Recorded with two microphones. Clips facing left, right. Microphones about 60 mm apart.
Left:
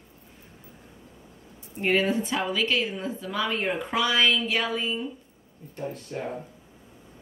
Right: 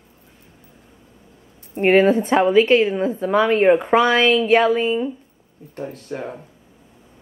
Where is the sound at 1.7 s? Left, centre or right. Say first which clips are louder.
Right 10 dB; right.